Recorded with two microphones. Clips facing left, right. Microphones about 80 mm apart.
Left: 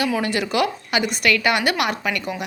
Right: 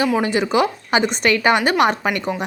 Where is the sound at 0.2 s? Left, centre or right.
Right.